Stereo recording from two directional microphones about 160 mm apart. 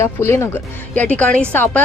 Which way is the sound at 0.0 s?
15° left (ahead or behind).